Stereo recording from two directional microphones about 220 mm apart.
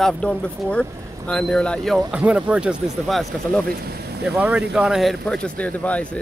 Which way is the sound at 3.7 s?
45° right (ahead or behind).